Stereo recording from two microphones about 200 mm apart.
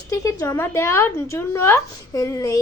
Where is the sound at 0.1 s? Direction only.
15° left (ahead or behind).